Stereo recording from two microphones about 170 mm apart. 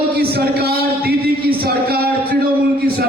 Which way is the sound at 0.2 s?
65° right (ahead or behind).